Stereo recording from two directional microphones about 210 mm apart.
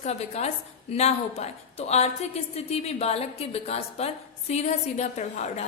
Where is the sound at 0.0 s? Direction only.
30° left (ahead or behind).